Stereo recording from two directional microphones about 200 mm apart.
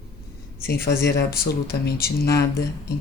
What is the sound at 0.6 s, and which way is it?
Speech, 50° left (ahead or behind).